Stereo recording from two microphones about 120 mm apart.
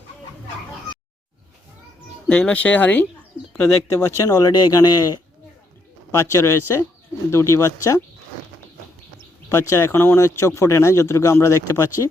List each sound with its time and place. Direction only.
2.2 s speech: 10° left (ahead or behind); by 8.0 s 25° left (ahead or behind)
9.5 s speech: 25° left (ahead or behind)